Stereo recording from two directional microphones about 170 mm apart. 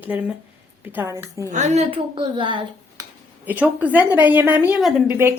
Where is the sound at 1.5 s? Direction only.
45° right (ahead or behind); by 2.6 s 30° right (ahead or behind).